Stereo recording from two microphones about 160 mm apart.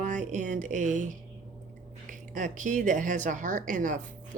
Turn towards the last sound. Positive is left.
turn(degrees=-55)  # may be behind; listen again after turning